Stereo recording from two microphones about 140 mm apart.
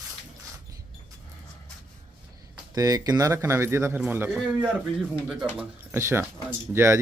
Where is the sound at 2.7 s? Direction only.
25° right (ahead or behind).